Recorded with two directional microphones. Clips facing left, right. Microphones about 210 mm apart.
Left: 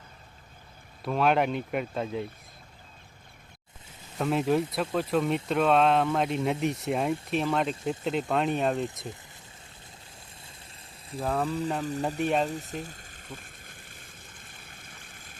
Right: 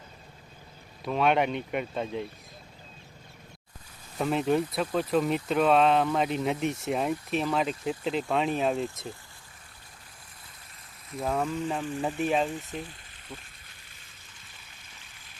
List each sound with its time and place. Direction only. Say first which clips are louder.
1.0 s speech: even; centre (ahead or behind)
4.2 s speech: even; centre (ahead or behind)
11.2 s speech: even; centre (ahead or behind)
11.4 s speech: left 1 dB; 35° left (ahead or behind)
12.2 s speech: even; centre (ahead or behind)
12.5 s boiling: left 1 dB; 40° left (ahead or behind)
14.7 s stream: left 5 dB; 55° left (ahead or behind)